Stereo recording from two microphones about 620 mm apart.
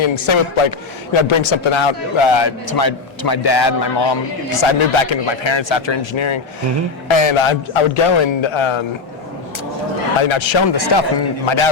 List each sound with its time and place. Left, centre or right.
0.0 s a man's voice: left
10.2 s a man's voice: left